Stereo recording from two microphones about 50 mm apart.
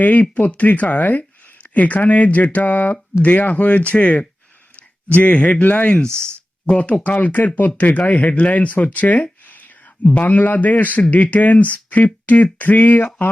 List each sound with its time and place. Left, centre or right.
0.0 s speech: left
4.8 s a sound: left
5.3 s speech: left
6.1 s speech: right
7.0 s speech: left